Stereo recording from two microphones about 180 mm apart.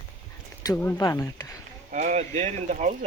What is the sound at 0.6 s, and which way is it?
Speech, 15° left (ahead or behind).